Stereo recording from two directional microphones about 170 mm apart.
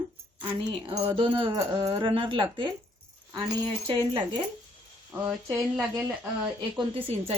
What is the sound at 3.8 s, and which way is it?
Speech, 30° right (ahead or behind).